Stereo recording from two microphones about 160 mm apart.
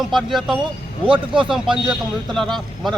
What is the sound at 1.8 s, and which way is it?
Speech, centre (ahead or behind).